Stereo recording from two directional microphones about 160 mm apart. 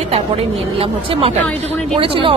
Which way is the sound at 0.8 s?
35° right (ahead or behind).